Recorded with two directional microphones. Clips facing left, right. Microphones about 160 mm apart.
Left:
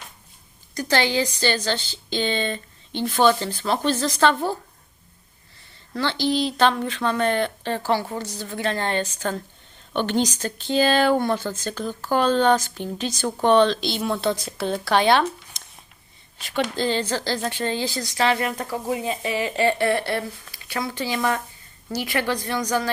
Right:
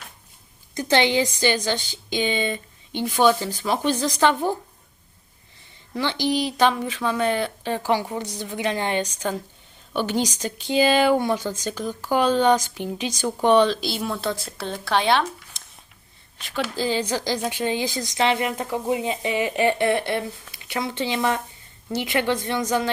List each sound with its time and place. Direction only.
0.7 s a woman's voice: 20° right (ahead or behind)
5.9 s a woman's voice: 15° right (ahead or behind)